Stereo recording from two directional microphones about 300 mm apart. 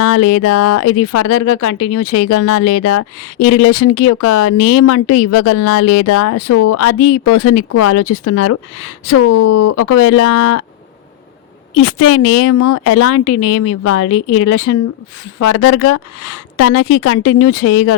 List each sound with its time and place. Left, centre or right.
0.0 s speech: left
11.7 s speech: left